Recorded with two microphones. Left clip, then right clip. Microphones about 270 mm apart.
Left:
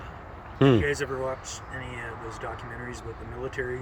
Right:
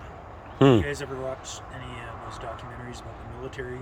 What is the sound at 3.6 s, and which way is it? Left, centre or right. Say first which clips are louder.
Speech: left 5 dB; centre.